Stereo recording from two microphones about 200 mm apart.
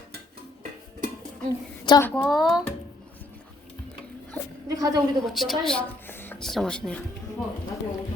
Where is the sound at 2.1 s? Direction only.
5° left (ahead or behind).